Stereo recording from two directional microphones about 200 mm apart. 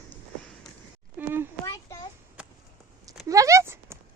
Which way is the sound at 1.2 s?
10° right (ahead or behind).